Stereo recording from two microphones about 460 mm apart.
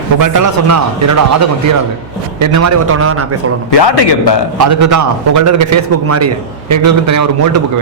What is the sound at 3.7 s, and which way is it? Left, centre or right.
Speech, left.